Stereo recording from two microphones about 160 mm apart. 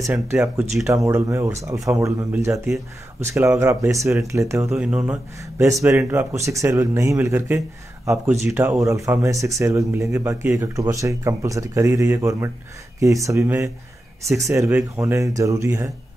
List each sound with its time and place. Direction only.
0.1 s speech: 15° right (ahead or behind)
4.6 s speech: 5° right (ahead or behind)